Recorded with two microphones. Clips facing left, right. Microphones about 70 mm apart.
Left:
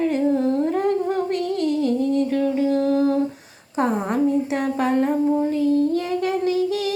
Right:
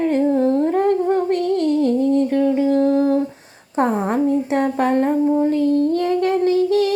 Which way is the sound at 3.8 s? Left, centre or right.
Right.